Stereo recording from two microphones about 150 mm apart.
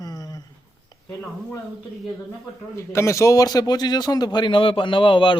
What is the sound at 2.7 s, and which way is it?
A man's voice, 20° left (ahead or behind).